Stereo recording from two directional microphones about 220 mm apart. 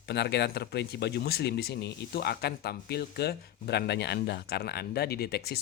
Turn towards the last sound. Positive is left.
turn(degrees=45)  # may be behind; listen again after turning